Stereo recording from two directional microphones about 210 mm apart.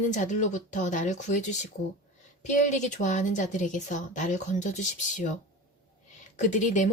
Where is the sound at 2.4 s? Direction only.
35° left (ahead or behind).